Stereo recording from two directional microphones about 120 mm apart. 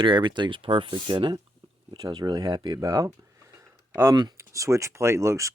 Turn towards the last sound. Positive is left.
turn(degrees=-25)  # may be behind; listen again after turning